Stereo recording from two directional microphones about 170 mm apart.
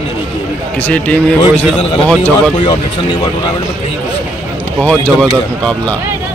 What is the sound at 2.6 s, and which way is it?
Speech, 30° left (ahead or behind).